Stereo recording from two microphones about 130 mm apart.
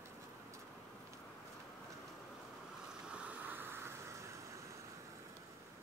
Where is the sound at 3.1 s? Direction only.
10° right (ahead or behind).